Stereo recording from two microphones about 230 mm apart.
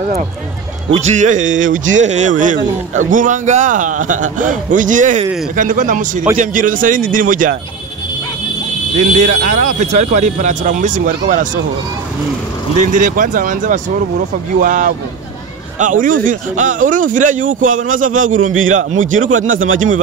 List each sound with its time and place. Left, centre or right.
0.8 s a man's voice: right
9.1 s a man's voice: right
12.7 s a man's voice: right